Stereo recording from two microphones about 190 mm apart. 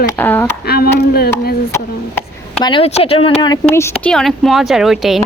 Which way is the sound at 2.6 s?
30° left (ahead or behind).